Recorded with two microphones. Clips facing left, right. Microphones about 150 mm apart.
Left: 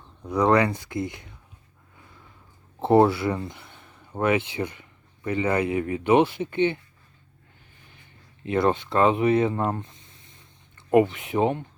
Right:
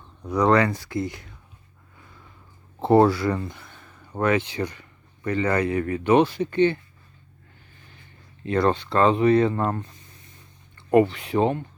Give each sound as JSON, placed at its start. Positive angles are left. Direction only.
{"t": 0.3, "sound": "speech", "side_deg": 20}
{"t": 2.8, "sound": "speech", "side_deg": 20}
{"t": 8.4, "sound": "speech", "side_deg": 20}